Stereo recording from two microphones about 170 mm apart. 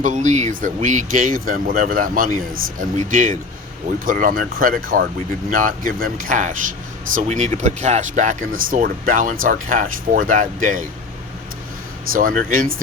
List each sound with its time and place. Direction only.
0.0 s speech: 45° right (ahead or behind)
12.1 s speech: 55° right (ahead or behind)